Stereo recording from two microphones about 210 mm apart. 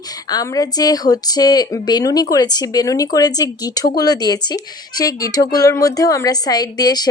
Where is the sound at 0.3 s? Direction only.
20° left (ahead or behind).